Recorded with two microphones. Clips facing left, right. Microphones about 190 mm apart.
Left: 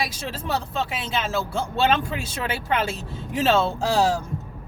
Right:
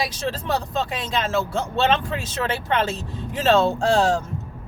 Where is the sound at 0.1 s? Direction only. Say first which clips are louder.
Right 3 dB; 10° left (ahead or behind).